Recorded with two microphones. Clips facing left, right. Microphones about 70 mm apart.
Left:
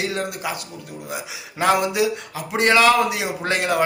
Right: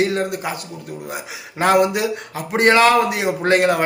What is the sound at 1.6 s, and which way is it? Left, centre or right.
A man's voice, right.